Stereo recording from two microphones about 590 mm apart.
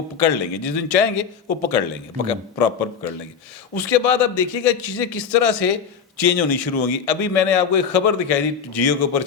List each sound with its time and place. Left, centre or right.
0.2 s a man's voice: left